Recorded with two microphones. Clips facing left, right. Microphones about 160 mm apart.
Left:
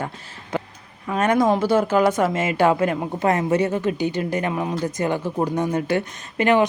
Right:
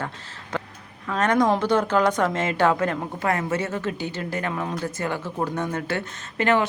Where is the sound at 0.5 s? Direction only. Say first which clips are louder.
Left 4 dB; 10° left (ahead or behind).